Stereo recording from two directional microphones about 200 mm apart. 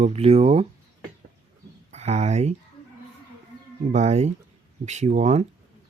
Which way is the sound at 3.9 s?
35° right (ahead or behind).